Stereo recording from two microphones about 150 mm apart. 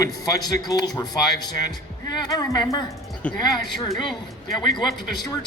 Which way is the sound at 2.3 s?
25° left (ahead or behind).